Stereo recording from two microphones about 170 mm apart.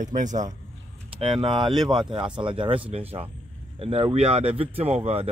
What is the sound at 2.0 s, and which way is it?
Speech, 25° right (ahead or behind).